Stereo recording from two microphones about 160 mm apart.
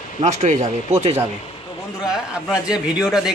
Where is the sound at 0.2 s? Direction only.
45° right (ahead or behind).